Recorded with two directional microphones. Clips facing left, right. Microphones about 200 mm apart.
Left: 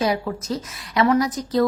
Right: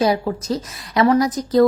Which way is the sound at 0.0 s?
35° right (ahead or behind).